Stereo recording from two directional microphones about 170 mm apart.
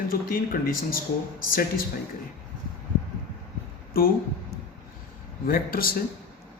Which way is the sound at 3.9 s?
60° left (ahead or behind).